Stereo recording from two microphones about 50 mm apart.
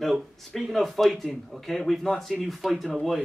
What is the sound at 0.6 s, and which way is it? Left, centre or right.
Speech, centre.